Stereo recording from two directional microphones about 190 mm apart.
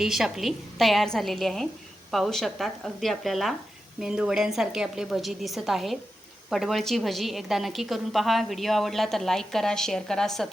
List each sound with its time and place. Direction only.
0.0 s a woman's voice: centre (ahead or behind)